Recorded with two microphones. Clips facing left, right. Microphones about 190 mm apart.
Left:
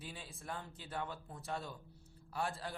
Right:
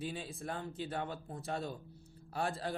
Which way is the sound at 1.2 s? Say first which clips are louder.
Right 6 dB; 40° right (ahead or behind).